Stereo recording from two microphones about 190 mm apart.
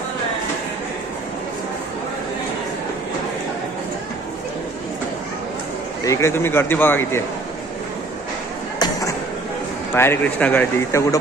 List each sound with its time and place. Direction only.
6.1 s speech: 15° left (ahead or behind)
8.8 s a sound: 20° left (ahead or behind)
9.9 s speech: 10° left (ahead or behind)